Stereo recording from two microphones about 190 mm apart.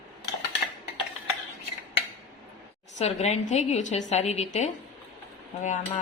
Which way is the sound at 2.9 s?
35° left (ahead or behind).